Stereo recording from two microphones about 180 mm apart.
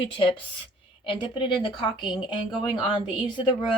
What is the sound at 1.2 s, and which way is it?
A woman's voice, 30° left (ahead or behind).